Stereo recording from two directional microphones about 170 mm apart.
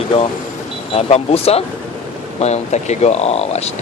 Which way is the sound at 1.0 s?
35° left (ahead or behind).